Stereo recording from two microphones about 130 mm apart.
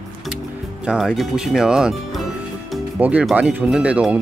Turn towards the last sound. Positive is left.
turn(degrees=-10)  # may be behind; listen again after turning